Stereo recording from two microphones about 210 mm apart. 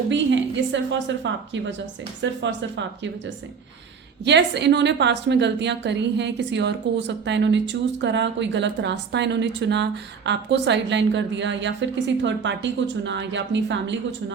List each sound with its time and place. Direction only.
0.1 s a woman's voice: 60° right (ahead or behind)